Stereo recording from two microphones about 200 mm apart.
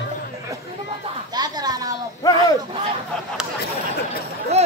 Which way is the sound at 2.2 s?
15° left (ahead or behind).